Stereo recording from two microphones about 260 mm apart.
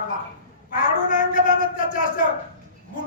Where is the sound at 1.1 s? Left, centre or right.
Left.